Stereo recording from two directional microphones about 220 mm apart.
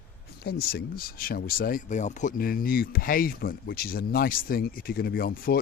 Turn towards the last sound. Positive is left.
turn(degrees=45)  # may be behind; listen again after turning